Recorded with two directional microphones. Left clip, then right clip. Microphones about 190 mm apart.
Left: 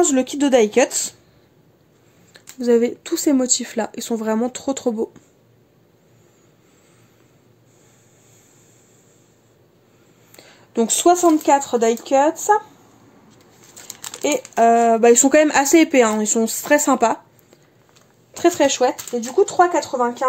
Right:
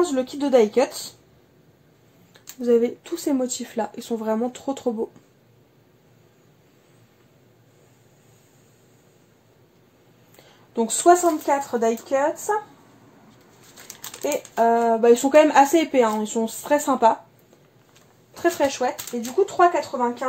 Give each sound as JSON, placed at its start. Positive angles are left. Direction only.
{"t": 0.0, "sound": "speech", "side_deg": 45}
{"t": 2.3, "sound": "speech", "side_deg": 35}
{"t": 10.3, "sound": "speech", "side_deg": 40}
{"t": 14.2, "sound": "speech", "side_deg": 45}
{"t": 18.3, "sound": "speech", "side_deg": 50}